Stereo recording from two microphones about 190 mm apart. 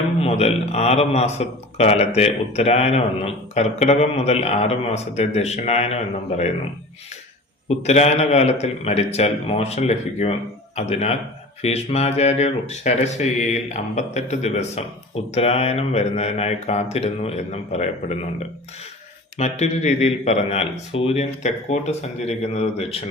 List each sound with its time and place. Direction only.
0.2 s a man's voice: 35° left (ahead or behind)
7.8 s a man's voice: 35° left (ahead or behind)
19.4 s a man's voice: 35° left (ahead or behind)